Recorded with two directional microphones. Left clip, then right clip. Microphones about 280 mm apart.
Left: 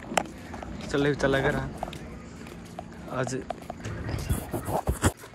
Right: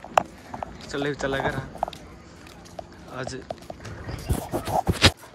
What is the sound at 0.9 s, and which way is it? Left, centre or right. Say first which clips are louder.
Speech: left 3 dB; centre.